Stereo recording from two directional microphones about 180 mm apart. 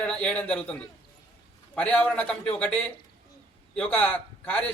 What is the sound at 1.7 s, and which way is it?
A man's voice, 5° left (ahead or behind).